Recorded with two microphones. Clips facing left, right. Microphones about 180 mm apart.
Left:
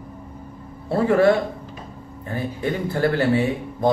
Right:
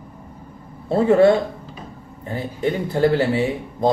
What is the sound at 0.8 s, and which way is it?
A man's voice, 20° right (ahead or behind).